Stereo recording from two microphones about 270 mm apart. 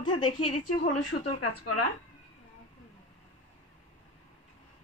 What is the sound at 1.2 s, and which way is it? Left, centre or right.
Speech, left.